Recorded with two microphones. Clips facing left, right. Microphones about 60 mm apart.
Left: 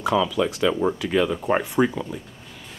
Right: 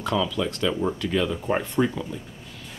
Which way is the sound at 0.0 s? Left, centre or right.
Centre.